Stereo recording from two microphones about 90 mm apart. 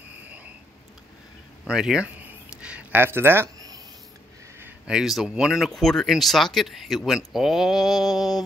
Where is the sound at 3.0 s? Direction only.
25° right (ahead or behind).